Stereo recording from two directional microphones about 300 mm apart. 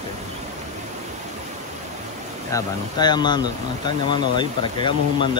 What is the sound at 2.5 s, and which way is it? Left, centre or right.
Speech, centre.